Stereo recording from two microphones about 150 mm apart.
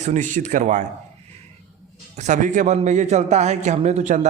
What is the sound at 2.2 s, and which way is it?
A man's voice, 55° right (ahead or behind).